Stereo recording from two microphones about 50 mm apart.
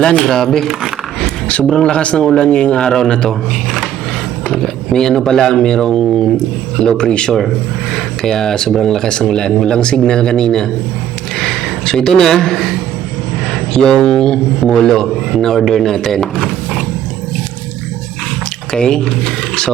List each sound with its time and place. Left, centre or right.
0.2 s speech: centre
1.8 s a man's voice: left
11.3 s a sound: centre
13.7 s speech: centre
18.7 s speech: centre